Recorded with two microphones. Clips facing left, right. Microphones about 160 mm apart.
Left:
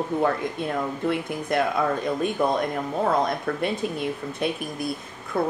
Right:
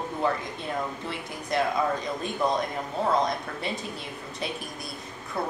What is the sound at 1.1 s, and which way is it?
Speech, 55° left (ahead or behind).